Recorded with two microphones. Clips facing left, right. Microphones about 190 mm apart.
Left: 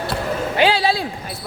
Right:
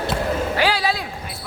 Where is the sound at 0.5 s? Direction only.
25° left (ahead or behind).